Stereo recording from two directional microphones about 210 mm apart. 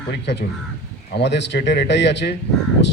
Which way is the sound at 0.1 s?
55° left (ahead or behind).